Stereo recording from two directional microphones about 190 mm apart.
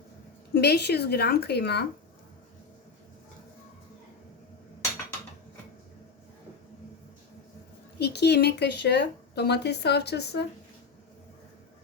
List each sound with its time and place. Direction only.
0.5 s speech: 60° left (ahead or behind)
7.9 s speech: 60° left (ahead or behind)